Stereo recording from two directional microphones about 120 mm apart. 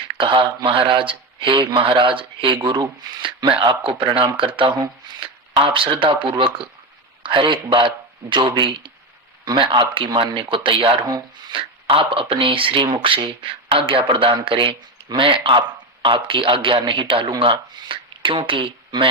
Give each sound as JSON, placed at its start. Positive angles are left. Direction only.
{"t": 0.1, "sound": "speech", "side_deg": -45}
{"t": 11.9, "sound": "speech", "side_deg": -50}